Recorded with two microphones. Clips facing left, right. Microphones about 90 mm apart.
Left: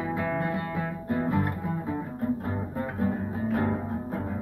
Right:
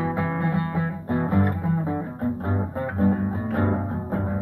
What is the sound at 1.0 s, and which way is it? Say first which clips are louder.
Music: right 4 dB; 35° right (ahead or behind).